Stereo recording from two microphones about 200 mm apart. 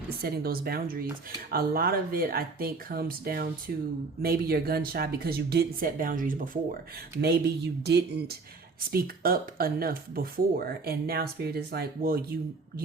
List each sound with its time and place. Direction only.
0.2 s speech: 50° right (ahead or behind)
7.2 s speech: 55° right (ahead or behind)